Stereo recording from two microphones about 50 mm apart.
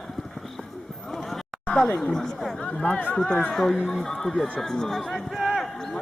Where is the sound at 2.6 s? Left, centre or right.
Centre.